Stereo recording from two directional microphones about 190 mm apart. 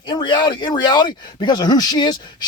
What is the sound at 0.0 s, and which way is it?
Speech, 25° left (ahead or behind).